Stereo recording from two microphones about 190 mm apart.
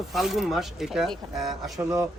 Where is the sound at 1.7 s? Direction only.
20° right (ahead or behind).